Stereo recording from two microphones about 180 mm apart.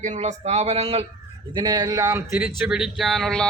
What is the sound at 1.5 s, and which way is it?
Speech, 25° right (ahead or behind).